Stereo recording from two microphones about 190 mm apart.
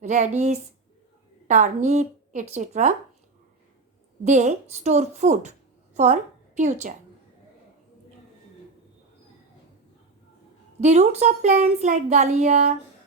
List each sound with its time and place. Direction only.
0.0 s speech: 35° right (ahead or behind)
4.2 s a woman's voice: 35° right (ahead or behind)
10.8 s speech: 35° right (ahead or behind)